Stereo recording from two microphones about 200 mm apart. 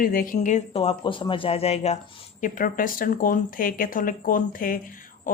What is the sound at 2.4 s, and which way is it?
Speech, 45° left (ahead or behind).